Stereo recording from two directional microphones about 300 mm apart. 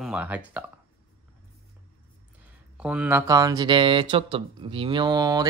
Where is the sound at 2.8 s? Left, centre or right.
Centre.